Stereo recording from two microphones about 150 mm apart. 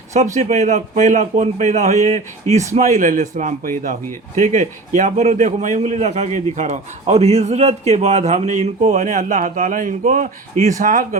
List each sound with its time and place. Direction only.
0.3 s a man's voice: 50° right (ahead or behind)